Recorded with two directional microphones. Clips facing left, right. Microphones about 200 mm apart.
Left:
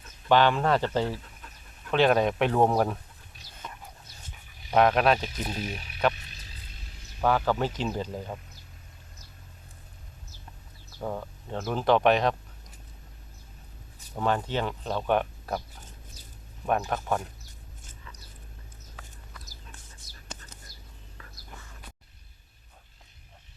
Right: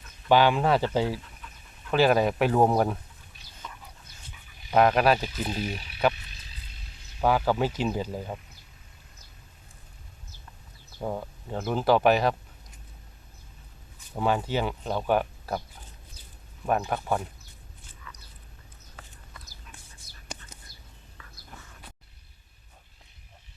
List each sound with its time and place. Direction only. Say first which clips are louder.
0.3 s speech: right 1 dB; 10° right (ahead or behind)
3.6 s dog: left 1 dB; 55° left (ahead or behind)
4.7 s speech: right 1 dB; centre (ahead or behind)
7.2 s speech: right 1 dB; 10° right (ahead or behind)
11.0 s speech: right 1 dB; 10° right (ahead or behind)
14.2 s speech: right 1 dB; 10° right (ahead or behind)
16.6 s speech: right 1 dB; centre (ahead or behind)
18.1 s biting: right 2 dB; 30° left (ahead or behind)
20.3 s a sound: right 2 dB; 10° right (ahead or behind)